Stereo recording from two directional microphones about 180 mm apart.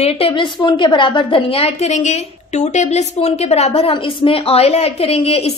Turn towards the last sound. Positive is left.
turn(degrees=35)  # may be behind; listen again after turning